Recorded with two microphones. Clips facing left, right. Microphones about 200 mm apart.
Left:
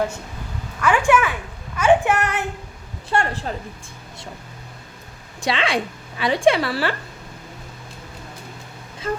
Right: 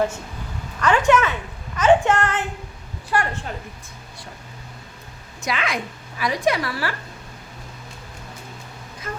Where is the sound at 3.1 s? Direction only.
30° left (ahead or behind).